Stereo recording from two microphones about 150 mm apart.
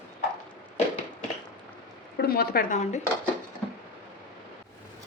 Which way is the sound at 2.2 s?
85° left.